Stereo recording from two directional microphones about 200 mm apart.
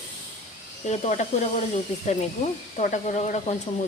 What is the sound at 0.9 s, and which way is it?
Speech, 35° left (ahead or behind).